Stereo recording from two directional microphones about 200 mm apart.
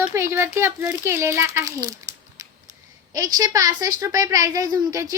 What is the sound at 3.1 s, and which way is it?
A woman's voice, 20° right (ahead or behind).